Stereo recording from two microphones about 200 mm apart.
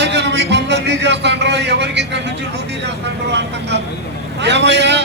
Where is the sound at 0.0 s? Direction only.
60° right (ahead or behind).